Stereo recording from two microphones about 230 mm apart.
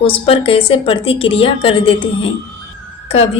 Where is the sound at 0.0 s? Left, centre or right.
Left.